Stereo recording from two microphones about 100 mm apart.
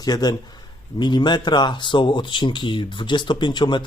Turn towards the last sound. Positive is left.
turn(degrees=50)  # may be behind; listen again after turning